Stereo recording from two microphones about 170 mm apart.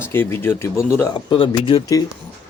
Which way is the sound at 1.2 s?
30° left (ahead or behind).